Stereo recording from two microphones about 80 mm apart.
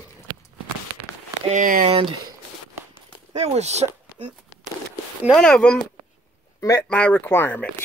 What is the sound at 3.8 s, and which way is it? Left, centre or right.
Speech, right.